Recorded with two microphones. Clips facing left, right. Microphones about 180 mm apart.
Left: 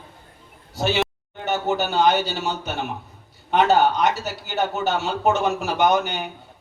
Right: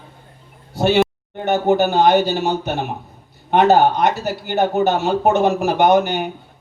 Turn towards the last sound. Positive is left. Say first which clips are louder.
# right 5 dB
turn(degrees=-60)  # may be behind; listen again after turning